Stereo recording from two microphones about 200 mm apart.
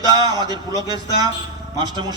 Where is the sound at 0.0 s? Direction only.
20° right (ahead or behind).